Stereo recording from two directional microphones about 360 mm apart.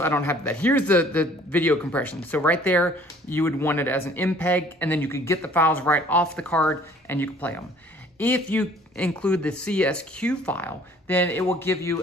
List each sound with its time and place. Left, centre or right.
0.0 s a man's voice: centre